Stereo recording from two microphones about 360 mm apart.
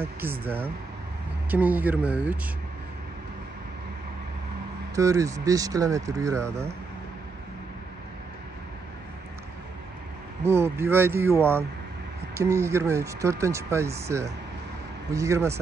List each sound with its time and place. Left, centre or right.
0.0 s speech: centre
4.9 s speech: centre
10.4 s speech: centre